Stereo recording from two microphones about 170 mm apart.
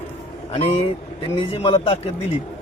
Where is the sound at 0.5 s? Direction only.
35° left (ahead or behind).